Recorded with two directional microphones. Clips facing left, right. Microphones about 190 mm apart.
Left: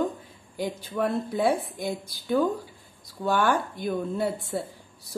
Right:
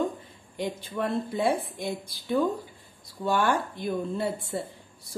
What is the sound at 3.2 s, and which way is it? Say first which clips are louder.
Speech: left 1 dB; centre (ahead or behind).